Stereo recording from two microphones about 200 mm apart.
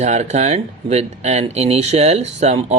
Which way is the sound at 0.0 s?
35° right (ahead or behind).